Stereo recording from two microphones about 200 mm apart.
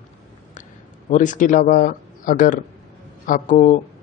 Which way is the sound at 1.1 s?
40° left (ahead or behind).